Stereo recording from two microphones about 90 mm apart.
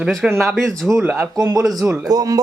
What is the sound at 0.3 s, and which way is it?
Speech, centre (ahead or behind).